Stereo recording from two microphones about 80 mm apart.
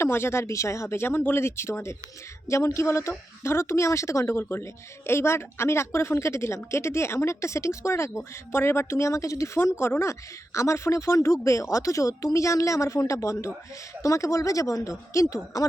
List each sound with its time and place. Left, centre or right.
0.0 s a woman's voice: left